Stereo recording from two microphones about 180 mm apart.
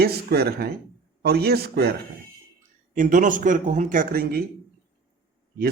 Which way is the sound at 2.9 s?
45° right (ahead or behind).